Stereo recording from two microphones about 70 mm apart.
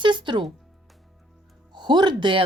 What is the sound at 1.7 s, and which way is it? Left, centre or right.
Music, right.